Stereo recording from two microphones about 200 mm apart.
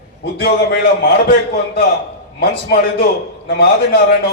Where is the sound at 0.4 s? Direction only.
50° left (ahead or behind).